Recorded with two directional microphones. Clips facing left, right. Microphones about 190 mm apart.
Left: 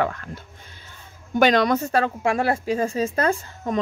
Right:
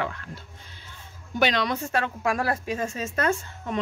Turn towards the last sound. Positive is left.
turn(degrees=35)  # may be behind; listen again after turning